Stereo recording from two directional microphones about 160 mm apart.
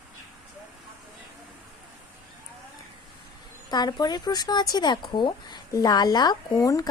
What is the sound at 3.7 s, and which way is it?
Speech, 25° left (ahead or behind).